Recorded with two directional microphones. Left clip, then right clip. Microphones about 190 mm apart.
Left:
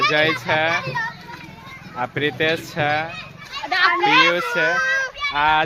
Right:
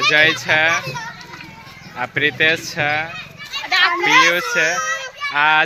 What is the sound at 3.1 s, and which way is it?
Children playing, 30° left (ahead or behind).